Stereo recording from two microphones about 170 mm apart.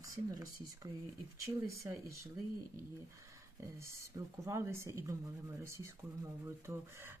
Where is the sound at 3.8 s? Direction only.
20° right (ahead or behind).